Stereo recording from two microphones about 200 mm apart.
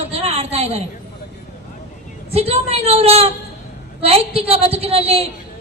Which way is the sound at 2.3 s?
30° right (ahead or behind).